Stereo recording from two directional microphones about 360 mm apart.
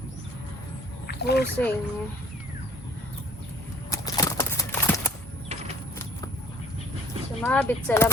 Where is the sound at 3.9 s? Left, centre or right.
Centre.